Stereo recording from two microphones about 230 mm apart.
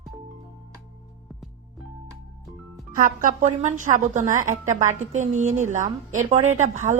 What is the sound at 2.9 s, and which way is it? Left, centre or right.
A woman's voice, right.